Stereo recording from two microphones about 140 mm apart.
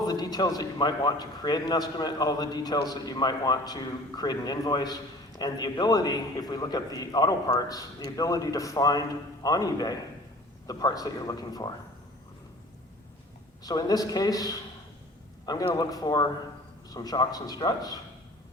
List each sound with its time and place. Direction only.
0.0 s a man's voice: 30° left (ahead or behind)
13.7 s a man's voice: 25° left (ahead or behind)